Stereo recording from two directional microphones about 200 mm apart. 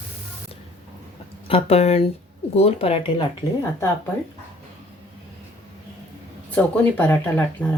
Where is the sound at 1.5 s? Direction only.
30° left (ahead or behind).